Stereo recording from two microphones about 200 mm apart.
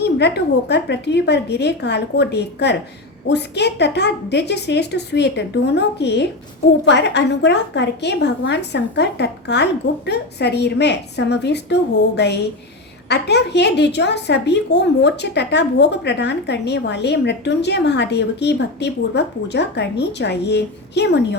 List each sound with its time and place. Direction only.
0.0 s a woman's voice: 55° left (ahead or behind)